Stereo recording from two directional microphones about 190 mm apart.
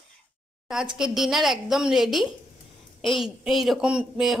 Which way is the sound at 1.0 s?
Centre (ahead or behind).